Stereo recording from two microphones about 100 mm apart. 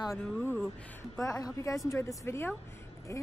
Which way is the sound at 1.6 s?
35° left (ahead or behind).